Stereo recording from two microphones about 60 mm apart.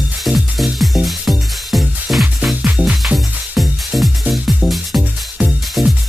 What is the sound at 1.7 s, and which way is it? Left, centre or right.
Music, centre.